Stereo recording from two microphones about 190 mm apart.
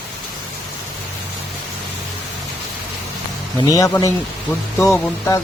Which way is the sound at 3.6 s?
20° left (ahead or behind).